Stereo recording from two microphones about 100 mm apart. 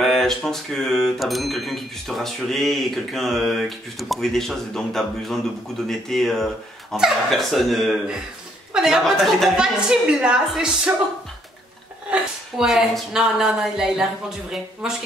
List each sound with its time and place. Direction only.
0.0 s a woman's voice: 5° left (ahead or behind)
12.1 s speech: 5° right (ahead or behind)